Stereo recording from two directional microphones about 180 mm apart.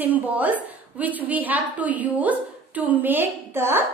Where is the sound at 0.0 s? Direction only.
10° right (ahead or behind).